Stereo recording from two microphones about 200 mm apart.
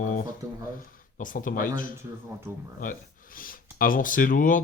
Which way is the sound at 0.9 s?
40° left (ahead or behind).